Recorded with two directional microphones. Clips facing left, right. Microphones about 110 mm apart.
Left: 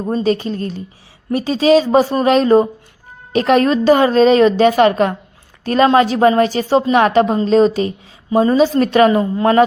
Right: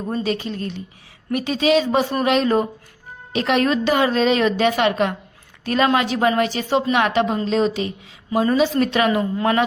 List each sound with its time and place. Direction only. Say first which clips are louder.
0.1 s a woman's voice: left 7 dB; 40° left (ahead or behind)